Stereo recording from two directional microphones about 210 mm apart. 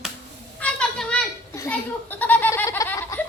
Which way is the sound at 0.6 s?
5° left (ahead or behind).